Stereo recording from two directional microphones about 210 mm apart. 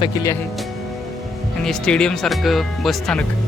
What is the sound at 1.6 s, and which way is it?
Speech, 5° left (ahead or behind).